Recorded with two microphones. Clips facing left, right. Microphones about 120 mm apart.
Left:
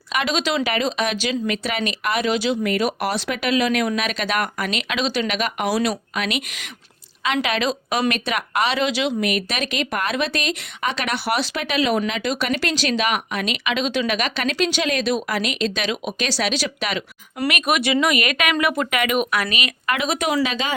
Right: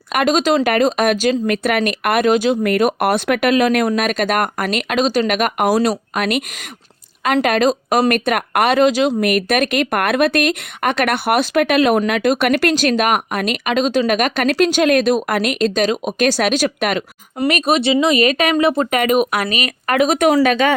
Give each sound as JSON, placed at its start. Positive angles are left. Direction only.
{"t": 0.1, "sound": "speech", "side_deg": -50}
{"t": 17.5, "sound": "speech", "side_deg": -30}